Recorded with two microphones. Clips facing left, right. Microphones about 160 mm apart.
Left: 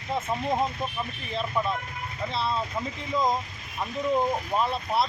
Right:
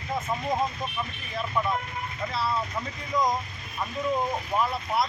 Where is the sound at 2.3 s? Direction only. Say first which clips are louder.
Even; 25° left (ahead or behind).